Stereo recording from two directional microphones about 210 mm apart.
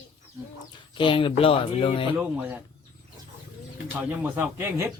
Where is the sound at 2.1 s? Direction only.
10° right (ahead or behind).